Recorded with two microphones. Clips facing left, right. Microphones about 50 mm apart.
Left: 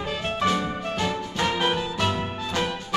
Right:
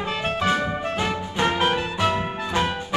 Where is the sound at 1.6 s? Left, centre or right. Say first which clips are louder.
Right 2 dB; right.